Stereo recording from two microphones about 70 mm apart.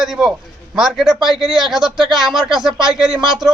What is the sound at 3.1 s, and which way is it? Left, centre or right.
Speech, right.